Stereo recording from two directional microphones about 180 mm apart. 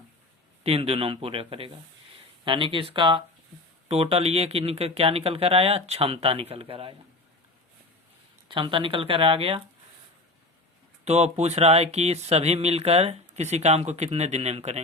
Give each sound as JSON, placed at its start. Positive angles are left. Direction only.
{"t": 0.6, "sound": "speech", "side_deg": -35}
{"t": 8.4, "sound": "speech", "side_deg": -25}
{"t": 11.0, "sound": "speech", "side_deg": -35}